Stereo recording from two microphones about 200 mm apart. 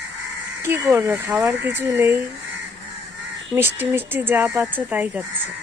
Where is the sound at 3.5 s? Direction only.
10° right (ahead or behind).